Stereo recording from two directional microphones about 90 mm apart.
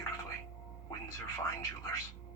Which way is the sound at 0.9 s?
35° left (ahead or behind).